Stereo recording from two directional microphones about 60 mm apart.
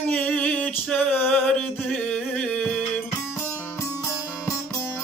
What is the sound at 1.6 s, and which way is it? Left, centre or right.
Music, centre.